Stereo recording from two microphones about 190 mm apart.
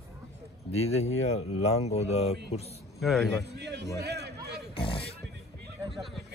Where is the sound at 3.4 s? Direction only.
60° right (ahead or behind).